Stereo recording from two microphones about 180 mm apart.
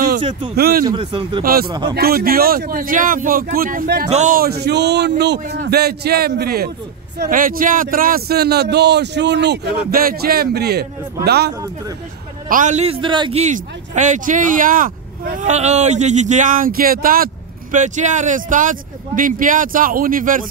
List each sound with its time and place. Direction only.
0.2 s speech: 30° right (ahead or behind)
0.6 s a man's voice: 60° right (ahead or behind)
0.8 s speech: 30° right (ahead or behind)
1.4 s a man's voice: 55° right (ahead or behind)
1.7 s speech: 25° right (ahead or behind)
2.0 s speech: 55° right (ahead or behind)
4.1 s a man's voice: 45° right (ahead or behind); by 11.5 s 65° right (ahead or behind)
12.4 s a man's voice: 45° right (ahead or behind); by 13.4 s 25° right (ahead or behind)
13.4 s speech: 45° right (ahead or behind)